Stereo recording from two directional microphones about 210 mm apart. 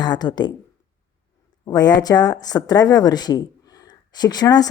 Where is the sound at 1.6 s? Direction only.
20° left (ahead or behind).